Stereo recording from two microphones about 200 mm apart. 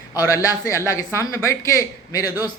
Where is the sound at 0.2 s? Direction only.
15° left (ahead or behind).